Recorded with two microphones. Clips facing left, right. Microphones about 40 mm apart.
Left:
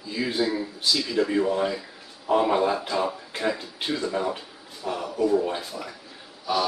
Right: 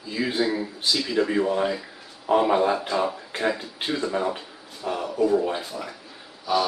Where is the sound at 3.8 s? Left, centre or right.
Centre.